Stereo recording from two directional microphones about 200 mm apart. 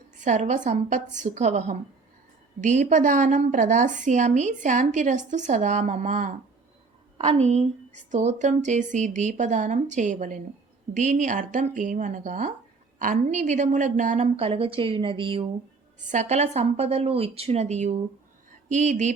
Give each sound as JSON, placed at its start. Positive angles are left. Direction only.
{"t": 0.2, "sound": "a woman's voice", "side_deg": -40}